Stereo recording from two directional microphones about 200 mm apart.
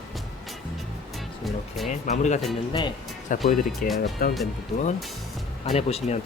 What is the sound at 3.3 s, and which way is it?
Speech, 45° left (ahead or behind).